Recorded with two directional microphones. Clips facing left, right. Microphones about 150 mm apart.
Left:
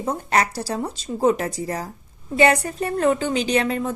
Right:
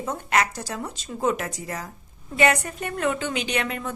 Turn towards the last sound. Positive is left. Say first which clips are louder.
# left 6 dB
turn(degrees=30)  # may be behind; listen again after turning